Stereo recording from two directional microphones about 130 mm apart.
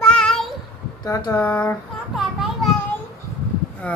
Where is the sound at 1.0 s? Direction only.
30° left (ahead or behind).